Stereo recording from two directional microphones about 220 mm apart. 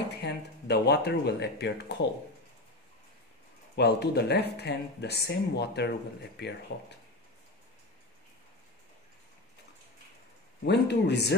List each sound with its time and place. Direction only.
0.2 s speech: 50° left (ahead or behind)
3.7 s speech: 50° left (ahead or behind)
10.6 s speech: 50° left (ahead or behind)